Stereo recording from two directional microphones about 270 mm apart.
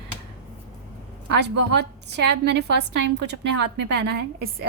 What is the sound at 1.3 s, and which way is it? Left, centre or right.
A woman's voice, right.